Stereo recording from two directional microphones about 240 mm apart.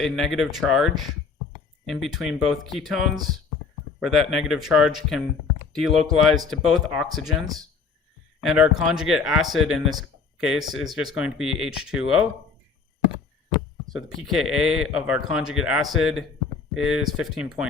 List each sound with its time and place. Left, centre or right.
0.0 s speech: centre
1.9 s speech: centre
13.9 s speech: centre